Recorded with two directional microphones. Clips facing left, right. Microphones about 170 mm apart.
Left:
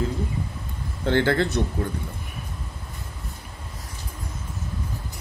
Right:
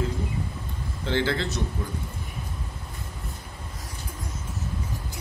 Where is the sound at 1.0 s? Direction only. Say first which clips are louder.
Left 5 dB; 55° left (ahead or behind).